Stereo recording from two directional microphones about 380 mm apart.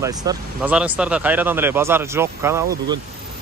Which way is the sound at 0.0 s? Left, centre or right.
Centre.